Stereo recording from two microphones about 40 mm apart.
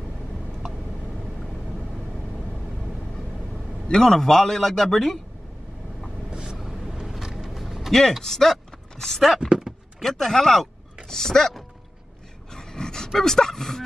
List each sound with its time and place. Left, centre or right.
3.9 s a man's voice: centre
6.3 s vehicle: right
6.6 s vehicle: centre
7.1 s creak: centre
8.2 s speech: centre
9.4 s vehicle: centre
9.9 s a man's voice: centre
12.5 s dog: centre
13.2 s a man's voice: centre